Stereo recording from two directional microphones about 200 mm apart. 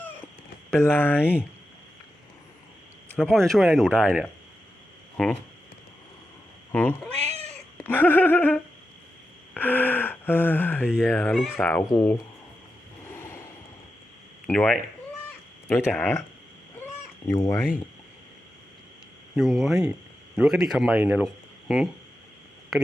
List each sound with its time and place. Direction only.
0.7 s gasp: 10° left (ahead or behind)
3.1 s speech: 5° left (ahead or behind)
6.7 s gasp: 10° left (ahead or behind)
7.2 s cat: 30° right (ahead or behind)
7.8 s gasp: 10° left (ahead or behind)
13.1 s a sound: 15° left (ahead or behind)
14.4 s speech: 5° left (ahead or behind)
15.9 s gasp: 10° left (ahead or behind)
17.2 s gasp: 15° left (ahead or behind)
19.4 s speech: centre (ahead or behind)